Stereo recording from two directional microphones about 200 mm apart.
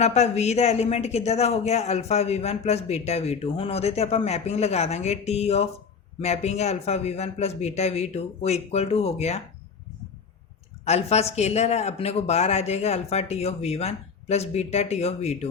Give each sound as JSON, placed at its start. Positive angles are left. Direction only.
{"t": 0.0, "sound": "speech", "side_deg": 35}
{"t": 10.8, "sound": "speech", "side_deg": 30}